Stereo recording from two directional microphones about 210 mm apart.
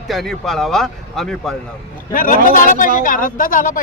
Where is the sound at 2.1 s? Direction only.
40° left (ahead or behind).